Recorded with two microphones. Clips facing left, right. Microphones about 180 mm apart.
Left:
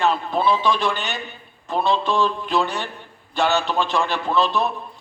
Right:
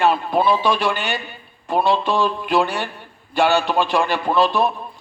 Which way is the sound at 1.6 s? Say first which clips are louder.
Right 2 dB; 15° right (ahead or behind).